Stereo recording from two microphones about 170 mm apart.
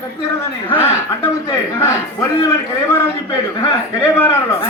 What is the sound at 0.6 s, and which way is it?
A man's voice, 15° left (ahead or behind).